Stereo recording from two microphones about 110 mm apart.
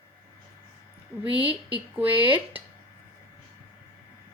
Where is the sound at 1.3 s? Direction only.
15° right (ahead or behind).